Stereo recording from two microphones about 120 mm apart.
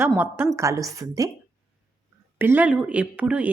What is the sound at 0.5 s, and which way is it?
Speech, 25° right (ahead or behind).